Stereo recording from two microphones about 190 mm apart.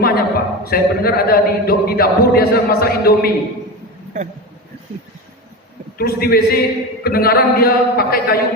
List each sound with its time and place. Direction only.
0.0 s speech: 55° left (ahead or behind)
6.0 s speech: 50° left (ahead or behind)